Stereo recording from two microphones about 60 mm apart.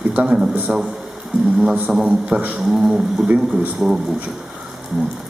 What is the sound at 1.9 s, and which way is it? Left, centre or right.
Speech, centre.